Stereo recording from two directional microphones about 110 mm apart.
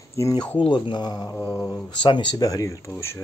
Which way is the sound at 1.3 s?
10° left (ahead or behind).